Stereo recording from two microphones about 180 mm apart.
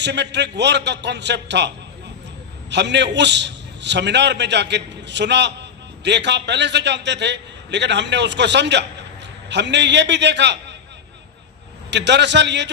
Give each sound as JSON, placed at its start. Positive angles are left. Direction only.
{"t": 0.0, "sound": "a man's voice", "side_deg": -75}
{"t": 11.9, "sound": "a man's voice", "side_deg": -75}